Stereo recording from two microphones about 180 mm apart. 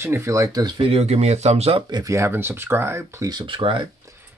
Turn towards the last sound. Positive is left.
turn(degrees=-15)  # may be behind; listen again after turning